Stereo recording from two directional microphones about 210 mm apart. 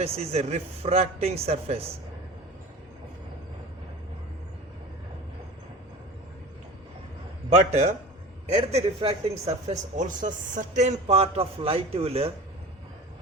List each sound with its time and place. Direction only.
0.0 s speech: 30° right (ahead or behind)
7.7 s a man's voice: 30° right (ahead or behind)